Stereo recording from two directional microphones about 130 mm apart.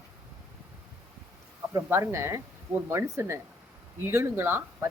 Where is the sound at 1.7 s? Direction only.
25° right (ahead or behind).